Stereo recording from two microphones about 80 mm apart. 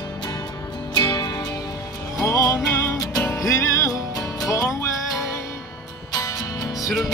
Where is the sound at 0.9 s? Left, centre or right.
Left.